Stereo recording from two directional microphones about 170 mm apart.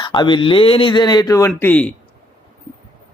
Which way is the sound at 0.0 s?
25° left (ahead or behind).